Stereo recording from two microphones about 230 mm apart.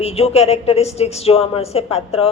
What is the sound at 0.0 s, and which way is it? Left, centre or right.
A woman's voice, left.